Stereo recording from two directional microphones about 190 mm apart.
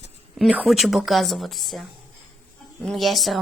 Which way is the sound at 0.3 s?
Centre (ahead or behind).